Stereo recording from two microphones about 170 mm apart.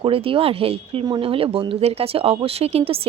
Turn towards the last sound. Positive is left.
turn(degrees=-35)  # may be behind; listen again after turning